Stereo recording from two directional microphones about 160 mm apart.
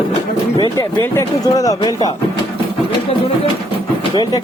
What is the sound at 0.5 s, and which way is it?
Speech, 30° left (ahead or behind).